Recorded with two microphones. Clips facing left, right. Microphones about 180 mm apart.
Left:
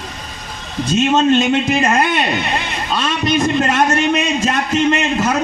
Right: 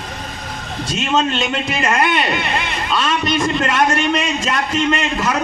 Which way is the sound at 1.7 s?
45° left (ahead or behind).